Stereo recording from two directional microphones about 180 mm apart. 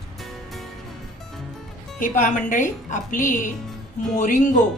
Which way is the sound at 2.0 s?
50° left (ahead or behind).